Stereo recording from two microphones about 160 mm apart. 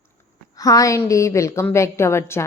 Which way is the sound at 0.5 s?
20° left (ahead or behind).